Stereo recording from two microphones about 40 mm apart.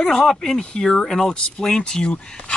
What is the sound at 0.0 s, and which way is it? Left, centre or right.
Speech, centre.